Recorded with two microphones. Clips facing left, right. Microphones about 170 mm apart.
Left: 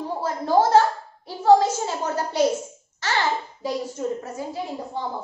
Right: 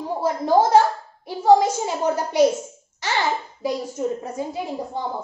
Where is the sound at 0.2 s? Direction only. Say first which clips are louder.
Right 2 dB; 15° right (ahead or behind).